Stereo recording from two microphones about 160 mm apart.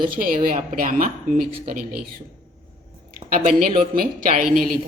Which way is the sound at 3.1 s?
55° right (ahead or behind).